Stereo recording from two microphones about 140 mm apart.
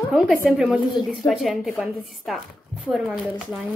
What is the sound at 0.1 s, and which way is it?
A woman's voice, 5° right (ahead or behind).